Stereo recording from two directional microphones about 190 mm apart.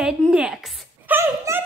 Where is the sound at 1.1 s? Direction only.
10° right (ahead or behind).